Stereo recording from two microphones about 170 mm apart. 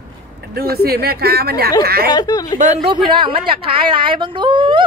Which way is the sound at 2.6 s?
40° right (ahead or behind).